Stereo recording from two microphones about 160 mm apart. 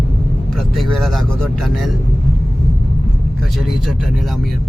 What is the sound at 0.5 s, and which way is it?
Speech, centre (ahead or behind).